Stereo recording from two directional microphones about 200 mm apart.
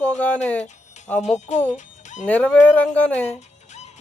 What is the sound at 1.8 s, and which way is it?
Music, 40° left (ahead or behind).